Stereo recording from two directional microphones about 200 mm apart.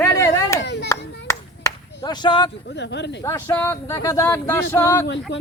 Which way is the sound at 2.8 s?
60° left (ahead or behind).